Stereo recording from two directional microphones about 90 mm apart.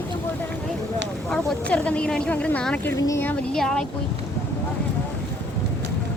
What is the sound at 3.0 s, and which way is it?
Speech, 40° left (ahead or behind).